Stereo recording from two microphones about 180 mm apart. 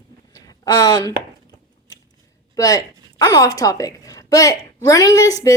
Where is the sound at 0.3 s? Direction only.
20° left (ahead or behind).